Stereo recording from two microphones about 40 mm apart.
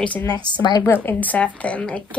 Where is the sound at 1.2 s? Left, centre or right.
Left.